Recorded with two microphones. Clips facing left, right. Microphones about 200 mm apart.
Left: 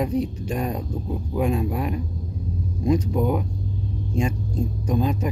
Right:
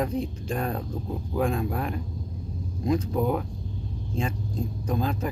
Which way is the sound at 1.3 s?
10° left (ahead or behind).